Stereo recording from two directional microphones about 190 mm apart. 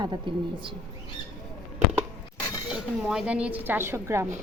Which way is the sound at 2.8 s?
5° right (ahead or behind).